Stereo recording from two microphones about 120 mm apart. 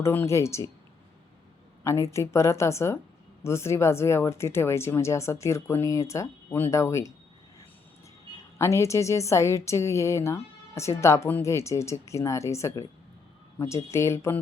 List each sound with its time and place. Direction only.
0.0 s a woman's voice: 20° left (ahead or behind)
1.8 s a woman's voice: 25° left (ahead or behind)
8.5 s a woman's voice: 25° left (ahead or behind)